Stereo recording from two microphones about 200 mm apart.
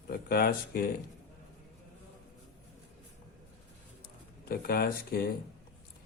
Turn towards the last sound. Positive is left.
turn(degrees=50)  # may be behind; listen again after turning